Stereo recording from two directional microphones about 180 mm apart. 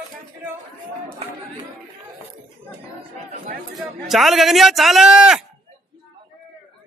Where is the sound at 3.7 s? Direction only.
Centre (ahead or behind).